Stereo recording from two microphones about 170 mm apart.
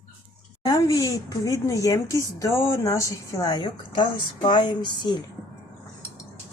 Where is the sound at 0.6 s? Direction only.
20° left (ahead or behind).